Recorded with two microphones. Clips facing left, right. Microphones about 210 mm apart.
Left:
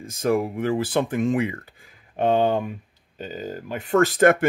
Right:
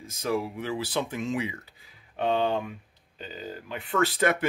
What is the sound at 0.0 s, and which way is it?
Speech, 50° left (ahead or behind).